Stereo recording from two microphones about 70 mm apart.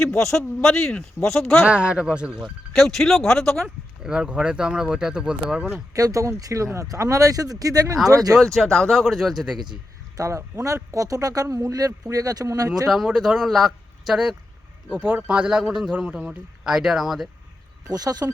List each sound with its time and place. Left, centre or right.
0.1 s speech: centre
1.6 s speech: centre
2.7 s speech: centre
4.0 s speech: centre
5.9 s speech: right
8.5 s speech: centre
10.2 s a man's voice: right
13.1 s speech: centre
14.9 s speech: right
15.3 s speech: centre
17.8 s speech: right